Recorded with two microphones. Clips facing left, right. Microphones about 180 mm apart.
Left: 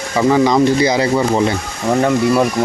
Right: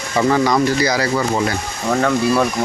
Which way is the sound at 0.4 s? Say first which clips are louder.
Left 4 dB; 20° left (ahead or behind).